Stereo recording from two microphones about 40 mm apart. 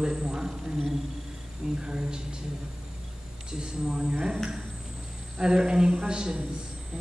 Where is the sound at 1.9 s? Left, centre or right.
Centre.